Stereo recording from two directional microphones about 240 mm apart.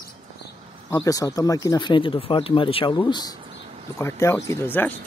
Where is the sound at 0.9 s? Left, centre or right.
Centre.